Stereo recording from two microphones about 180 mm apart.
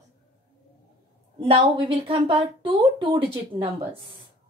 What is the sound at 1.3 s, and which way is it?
Speech, 30° right (ahead or behind).